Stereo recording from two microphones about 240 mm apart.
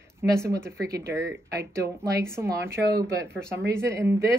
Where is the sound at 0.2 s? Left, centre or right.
Centre.